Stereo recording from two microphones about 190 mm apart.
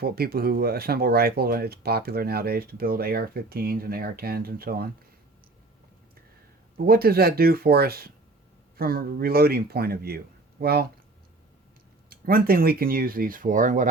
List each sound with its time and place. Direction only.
0.0 s speech: 55° right (ahead or behind)
6.7 s speech: 50° right (ahead or behind)
12.0 s speech: 50° right (ahead or behind)